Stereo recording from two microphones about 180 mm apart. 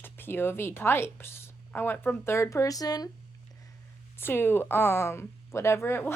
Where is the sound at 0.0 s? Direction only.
10° left (ahead or behind).